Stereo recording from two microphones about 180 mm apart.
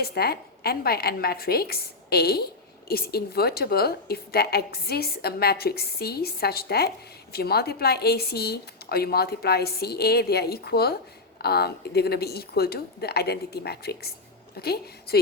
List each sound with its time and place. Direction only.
0.0 s a woman's voice: 60° left (ahead or behind)